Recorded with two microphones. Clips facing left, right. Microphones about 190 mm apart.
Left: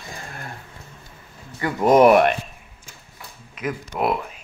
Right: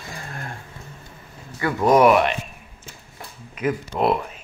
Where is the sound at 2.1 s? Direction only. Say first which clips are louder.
Left 2 dB; 50° left (ahead or behind).